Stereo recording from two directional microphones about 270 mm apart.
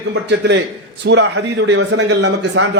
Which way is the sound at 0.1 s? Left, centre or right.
Right.